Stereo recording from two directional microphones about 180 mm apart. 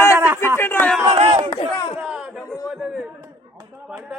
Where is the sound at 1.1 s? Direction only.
30° right (ahead or behind).